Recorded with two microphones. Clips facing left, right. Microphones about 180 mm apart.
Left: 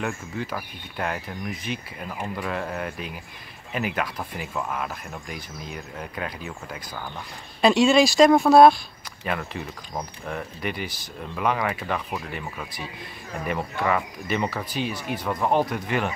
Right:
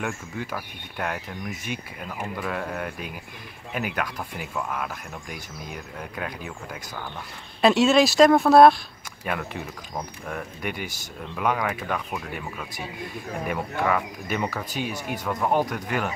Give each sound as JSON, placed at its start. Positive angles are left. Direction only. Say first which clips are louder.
{"t": 0.0, "sound": "speech", "louder": "left 1 dB", "side_deg": -10}
{"t": 13.5, "sound": "speech", "louder": "left 1 dB", "side_deg": 0}
{"t": 14.7, "sound": "speech", "louder": "left 1 dB", "side_deg": -50}
{"t": 15.2, "sound": "speech", "louder": "left 1 dB", "side_deg": 0}